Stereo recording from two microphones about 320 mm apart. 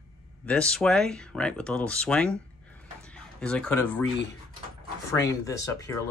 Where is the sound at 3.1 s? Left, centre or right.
Centre.